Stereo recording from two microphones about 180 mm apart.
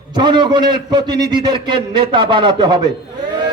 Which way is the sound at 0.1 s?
25° right (ahead or behind).